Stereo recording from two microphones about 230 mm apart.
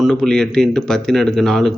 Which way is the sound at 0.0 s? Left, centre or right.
Centre.